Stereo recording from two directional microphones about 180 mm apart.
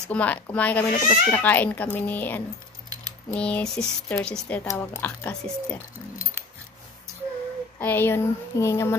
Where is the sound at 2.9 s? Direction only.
20° right (ahead or behind).